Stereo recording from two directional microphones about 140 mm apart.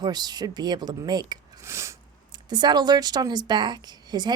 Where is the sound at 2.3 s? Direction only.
30° right (ahead or behind).